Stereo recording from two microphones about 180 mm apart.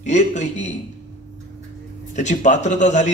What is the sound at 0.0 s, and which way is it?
Speech, 40° left (ahead or behind).